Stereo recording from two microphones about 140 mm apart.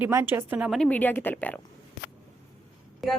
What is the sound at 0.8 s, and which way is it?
Speech, 10° left (ahead or behind).